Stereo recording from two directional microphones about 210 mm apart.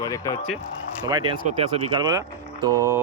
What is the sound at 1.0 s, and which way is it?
Speech, 20° right (ahead or behind).